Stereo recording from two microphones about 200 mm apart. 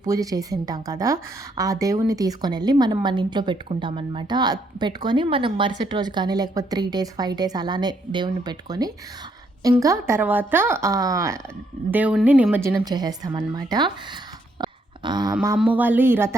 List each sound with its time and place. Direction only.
0.0 s a woman's voice: 15° right (ahead or behind)
14.6 s a sound: 20° right (ahead or behind)
15.5 s a woman's voice: 5° right (ahead or behind)